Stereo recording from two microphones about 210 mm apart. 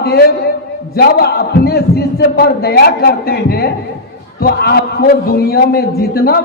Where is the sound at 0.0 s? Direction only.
50° left (ahead or behind).